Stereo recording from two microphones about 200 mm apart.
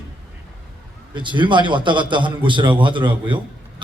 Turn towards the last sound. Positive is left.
turn(degrees=-25)  # may be behind; listen again after turning